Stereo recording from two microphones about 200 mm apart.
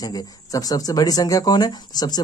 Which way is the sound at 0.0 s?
20° left (ahead or behind).